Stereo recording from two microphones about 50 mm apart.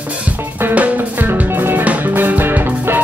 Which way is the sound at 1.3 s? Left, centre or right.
Right.